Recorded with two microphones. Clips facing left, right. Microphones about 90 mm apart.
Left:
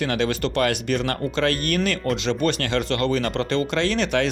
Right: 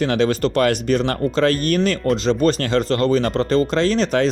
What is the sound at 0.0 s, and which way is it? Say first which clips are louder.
Speech: right 5 dB; 40° right (ahead or behind).